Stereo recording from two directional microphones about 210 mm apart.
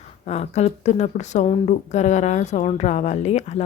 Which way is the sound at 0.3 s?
30° left (ahead or behind).